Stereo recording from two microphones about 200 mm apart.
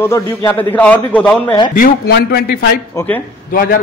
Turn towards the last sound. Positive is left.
turn(degrees=45)  # may be behind; listen again after turning